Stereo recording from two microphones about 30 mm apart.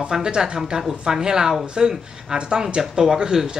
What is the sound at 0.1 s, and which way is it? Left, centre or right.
Speech, right.